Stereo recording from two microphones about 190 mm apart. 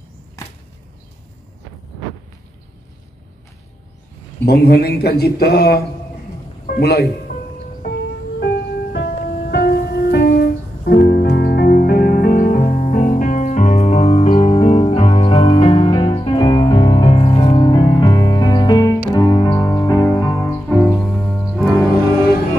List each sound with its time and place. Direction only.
4.5 s speech: 55° left (ahead or behind)
6.6 s music: 50° left (ahead or behind)
8.4 s music: 60° left (ahead or behind); by 21.8 s 5° left (ahead or behind)